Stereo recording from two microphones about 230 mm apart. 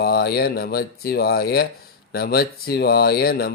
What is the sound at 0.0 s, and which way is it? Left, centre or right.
Speech, left.